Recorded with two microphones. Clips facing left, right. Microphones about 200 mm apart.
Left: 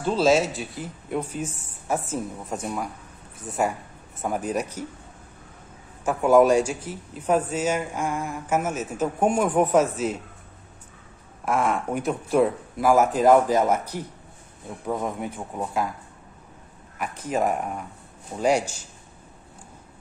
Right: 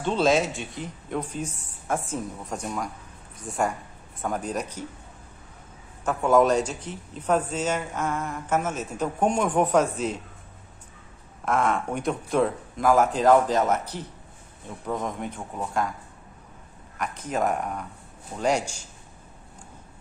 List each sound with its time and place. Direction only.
0.0 s speech: centre (ahead or behind)
6.0 s speech: 10° left (ahead or behind)
11.4 s speech: 10° left (ahead or behind)
17.0 s speech: 5° left (ahead or behind)
18.3 s a man's voice: 25° left (ahead or behind)